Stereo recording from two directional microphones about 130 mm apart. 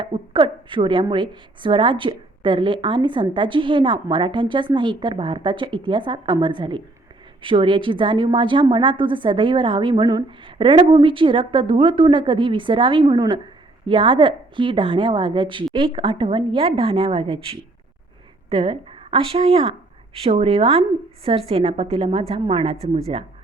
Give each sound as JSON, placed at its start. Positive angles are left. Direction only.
{"t": 0.0, "sound": "a woman's voice", "side_deg": -40}